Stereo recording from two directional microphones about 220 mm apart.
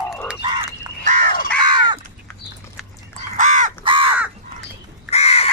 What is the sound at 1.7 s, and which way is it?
Crow, 20° right (ahead or behind).